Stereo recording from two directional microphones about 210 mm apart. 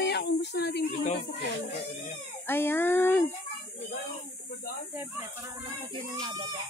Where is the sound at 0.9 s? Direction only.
35° left (ahead or behind).